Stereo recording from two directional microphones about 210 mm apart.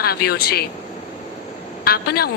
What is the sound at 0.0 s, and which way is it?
Speech, 50° left (ahead or behind).